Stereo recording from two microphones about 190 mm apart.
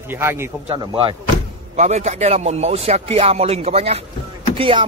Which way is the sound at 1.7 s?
35° right (ahead or behind).